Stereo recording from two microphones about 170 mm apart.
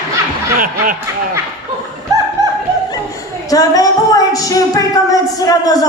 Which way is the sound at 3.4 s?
20° left (ahead or behind).